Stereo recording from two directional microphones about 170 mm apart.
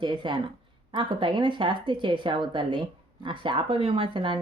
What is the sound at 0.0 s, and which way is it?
Speech, 30° right (ahead or behind).